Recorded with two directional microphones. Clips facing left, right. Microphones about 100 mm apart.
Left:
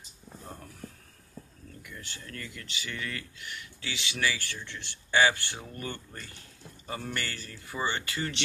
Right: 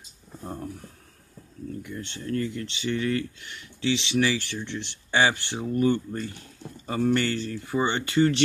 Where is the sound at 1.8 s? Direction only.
30° right (ahead or behind).